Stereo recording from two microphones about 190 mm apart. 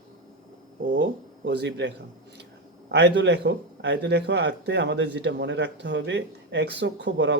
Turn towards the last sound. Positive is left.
turn(degrees=-65)  # may be behind; listen again after turning